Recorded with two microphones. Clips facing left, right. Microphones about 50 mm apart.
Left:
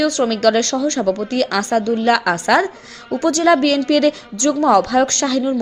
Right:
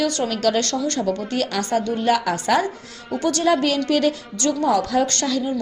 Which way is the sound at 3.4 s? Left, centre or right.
Left.